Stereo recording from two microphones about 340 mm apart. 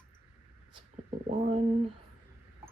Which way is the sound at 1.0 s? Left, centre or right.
Right.